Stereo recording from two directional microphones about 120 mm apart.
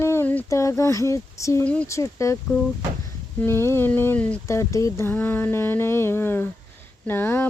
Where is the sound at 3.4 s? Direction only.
20° left (ahead or behind).